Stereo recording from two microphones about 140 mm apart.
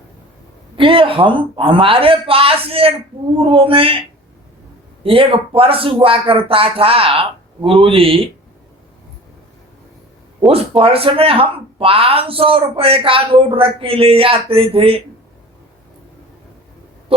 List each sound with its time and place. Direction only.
0.8 s speech: 40° right (ahead or behind)
5.0 s speech: 40° right (ahead or behind)
10.4 s speech: 40° right (ahead or behind)
17.1 s a sound: 40° right (ahead or behind)